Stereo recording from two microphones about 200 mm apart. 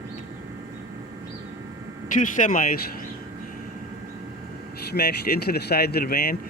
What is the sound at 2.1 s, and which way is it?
Speech, 40° left (ahead or behind).